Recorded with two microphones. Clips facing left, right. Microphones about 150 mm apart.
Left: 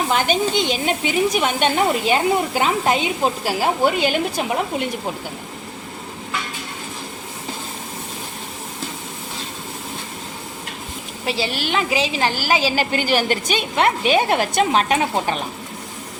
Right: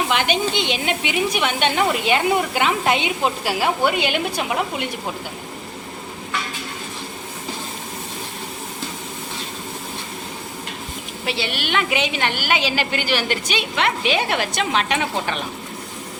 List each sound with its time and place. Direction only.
0.1 s a woman's voice: 40° left (ahead or behind)
11.3 s a woman's voice: 35° left (ahead or behind)